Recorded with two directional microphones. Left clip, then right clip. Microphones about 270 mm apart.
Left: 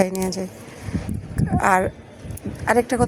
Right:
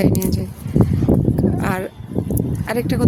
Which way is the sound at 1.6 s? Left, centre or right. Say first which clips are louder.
Left 5 dB; centre.